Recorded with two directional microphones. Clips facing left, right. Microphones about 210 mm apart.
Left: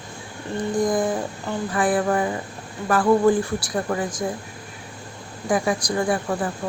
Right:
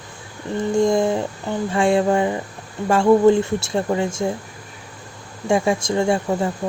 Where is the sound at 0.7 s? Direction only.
25° right (ahead or behind).